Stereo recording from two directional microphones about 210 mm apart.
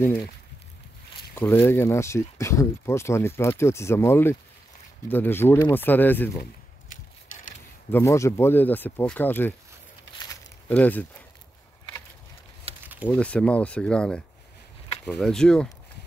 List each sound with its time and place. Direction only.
0.0 s speech: 10° left (ahead or behind)
1.3 s speech: 10° left (ahead or behind)
7.9 s speech: 15° left (ahead or behind)
10.1 s a sound: 15° left (ahead or behind)
12.8 s a sound: 10° right (ahead or behind)
13.1 s speech: 5° left (ahead or behind)